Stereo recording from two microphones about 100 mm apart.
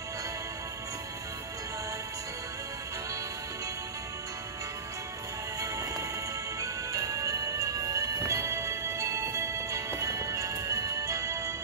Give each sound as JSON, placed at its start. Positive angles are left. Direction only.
{"t": 5.6, "sound": "music", "side_deg": -35}